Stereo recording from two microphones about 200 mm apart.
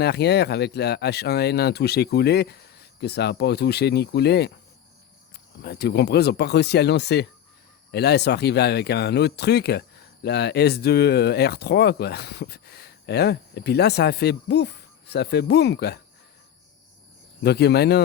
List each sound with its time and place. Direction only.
0.0 s speech: 55° left (ahead or behind)
17.4 s speech: 55° left (ahead or behind)